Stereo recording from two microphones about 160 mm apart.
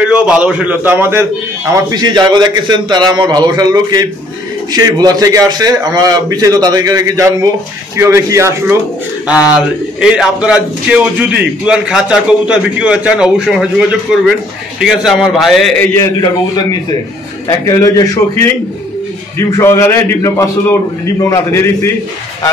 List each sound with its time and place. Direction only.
0.0 s a man's voice: 5° right (ahead or behind)
1.7 s a man's voice: 25° right (ahead or behind)
9.3 s speech: 5° right (ahead or behind)
15.8 s a man's voice: 15° left (ahead or behind)
17.5 s a man's voice: 20° left (ahead or behind)